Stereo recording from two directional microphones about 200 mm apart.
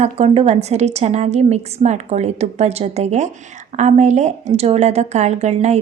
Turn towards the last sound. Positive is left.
turn(degrees=-35)  # may be behind; listen again after turning